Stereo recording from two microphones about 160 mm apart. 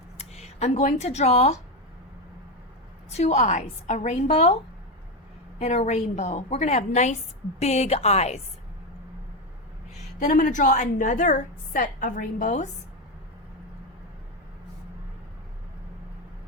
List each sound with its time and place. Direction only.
0.2 s speech: 40° left (ahead or behind)
3.1 s a woman's voice: 45° left (ahead or behind)
9.9 s a woman's voice: 45° left (ahead or behind)